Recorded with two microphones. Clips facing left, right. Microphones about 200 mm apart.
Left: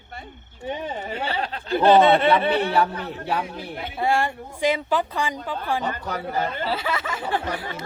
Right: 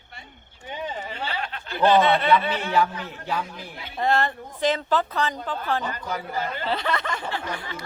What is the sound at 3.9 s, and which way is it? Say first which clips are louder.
Speech: even; 10° left (ahead or behind).